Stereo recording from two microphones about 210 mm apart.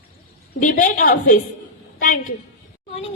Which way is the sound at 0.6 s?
40° left (ahead or behind).